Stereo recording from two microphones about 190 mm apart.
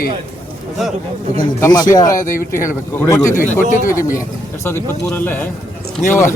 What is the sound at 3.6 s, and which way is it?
Speech, 45° left (ahead or behind).